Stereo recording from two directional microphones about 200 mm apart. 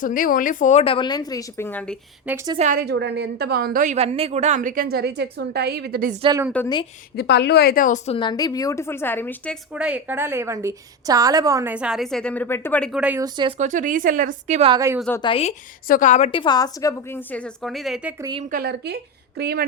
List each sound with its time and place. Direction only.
0.0 s a woman's voice: 45° left (ahead or behind); by 2.0 s 5° left (ahead or behind)
2.2 s a woman's voice: 15° right (ahead or behind)
2.6 s a woman's voice: 40° right (ahead or behind)
2.8 s a woman's voice: 60° right (ahead or behind)
6.5 s a woman's voice: 5° left (ahead or behind)
7.2 s a woman's voice: 55° left (ahead or behind); by 9.6 s 10° left (ahead or behind)
9.7 s a woman's voice: 5° right (ahead or behind); by 12.9 s 10° left (ahead or behind)
12.9 s a woman's voice: 5° right (ahead or behind)
13.2 s speech: 20° right (ahead or behind)
13.6 s a woman's voice: 40° right (ahead or behind)
15.2 s a woman's voice: 30° left (ahead or behind)
15.9 s a woman's voice: 40° left (ahead or behind); by 18.1 s centre (ahead or behind)
18.2 s speech: 25° right (ahead or behind)
18.4 s a woman's voice: 50° right (ahead or behind)